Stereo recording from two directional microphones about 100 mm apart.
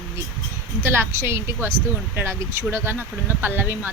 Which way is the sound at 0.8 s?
25° right (ahead or behind).